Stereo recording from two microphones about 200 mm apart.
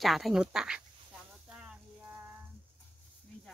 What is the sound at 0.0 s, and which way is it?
Speech, centre (ahead or behind).